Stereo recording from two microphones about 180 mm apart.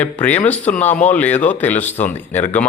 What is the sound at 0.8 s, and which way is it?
Speech, 40° left (ahead or behind).